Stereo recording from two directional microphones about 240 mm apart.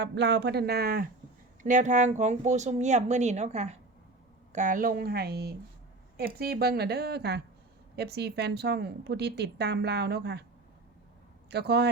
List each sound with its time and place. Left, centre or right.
0.0 s a woman's voice: right
11.5 s a woman's voice: right